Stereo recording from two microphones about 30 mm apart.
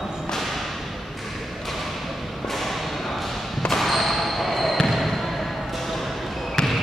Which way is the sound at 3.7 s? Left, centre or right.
Centre.